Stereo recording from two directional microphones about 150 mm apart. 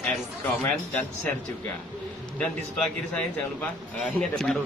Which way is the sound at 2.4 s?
10° left (ahead or behind).